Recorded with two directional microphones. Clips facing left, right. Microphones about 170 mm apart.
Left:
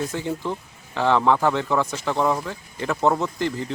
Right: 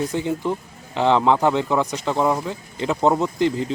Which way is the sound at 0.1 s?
15° right (ahead or behind).